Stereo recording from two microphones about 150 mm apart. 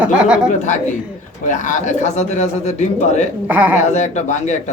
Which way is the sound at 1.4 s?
55° left (ahead or behind).